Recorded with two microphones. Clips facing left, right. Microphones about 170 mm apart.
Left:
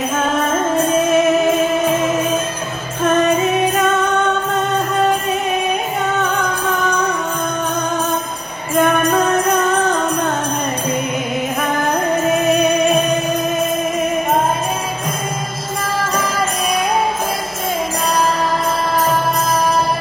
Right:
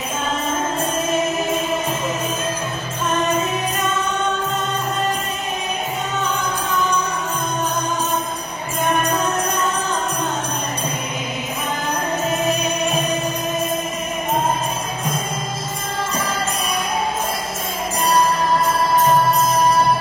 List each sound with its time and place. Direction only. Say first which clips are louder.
0.2 s music: left 4 dB; 65° left (ahead or behind)
6.2 s music: left 4 dB; 60° left (ahead or behind)
8.7 s music: left 6 dB; 70° left (ahead or behind)
12.4 s music: left 6 dB; 60° left (ahead or behind)